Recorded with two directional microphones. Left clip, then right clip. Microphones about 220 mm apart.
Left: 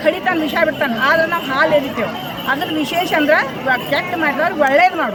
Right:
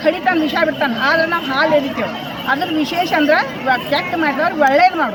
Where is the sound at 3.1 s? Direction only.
5° left (ahead or behind).